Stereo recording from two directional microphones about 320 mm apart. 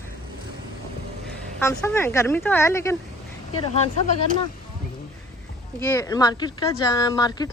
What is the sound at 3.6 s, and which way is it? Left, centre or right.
Speech, centre.